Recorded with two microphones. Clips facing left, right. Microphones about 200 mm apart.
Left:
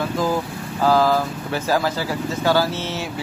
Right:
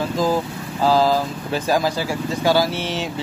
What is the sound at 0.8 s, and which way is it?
Speech, 15° right (ahead or behind).